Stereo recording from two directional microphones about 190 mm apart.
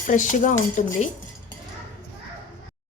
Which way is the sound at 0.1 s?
40° left (ahead or behind).